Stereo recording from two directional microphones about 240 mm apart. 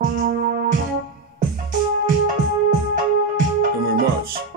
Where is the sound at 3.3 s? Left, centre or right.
Right.